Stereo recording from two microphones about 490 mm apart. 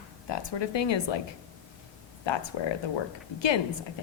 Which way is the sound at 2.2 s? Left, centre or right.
Left.